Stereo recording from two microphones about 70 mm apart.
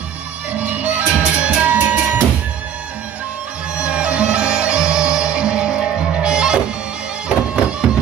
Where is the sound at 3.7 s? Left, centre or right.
Centre.